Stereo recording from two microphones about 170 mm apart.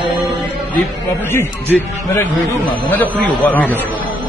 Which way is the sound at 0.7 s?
15° left (ahead or behind).